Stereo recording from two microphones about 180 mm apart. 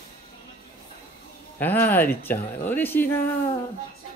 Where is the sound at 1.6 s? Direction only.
10° left (ahead or behind).